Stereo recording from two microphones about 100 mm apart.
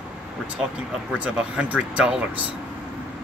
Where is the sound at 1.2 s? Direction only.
15° right (ahead or behind).